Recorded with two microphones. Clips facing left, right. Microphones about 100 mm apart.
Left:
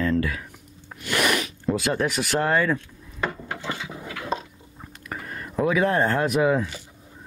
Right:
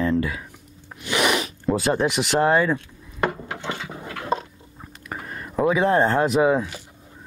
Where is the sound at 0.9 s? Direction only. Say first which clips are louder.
Right 2 dB; 15° right (ahead or behind).